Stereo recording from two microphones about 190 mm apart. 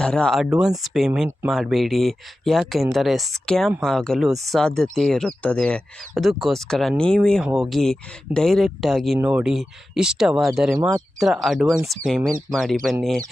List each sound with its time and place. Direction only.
0.0 s speech: 5° left (ahead or behind)
10.8 s speech: 20° right (ahead or behind)
11.2 s speech: centre (ahead or behind)